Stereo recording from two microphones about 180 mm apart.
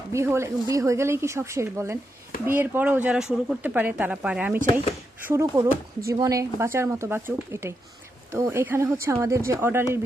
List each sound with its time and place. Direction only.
0.1 s speech: 15° right (ahead or behind)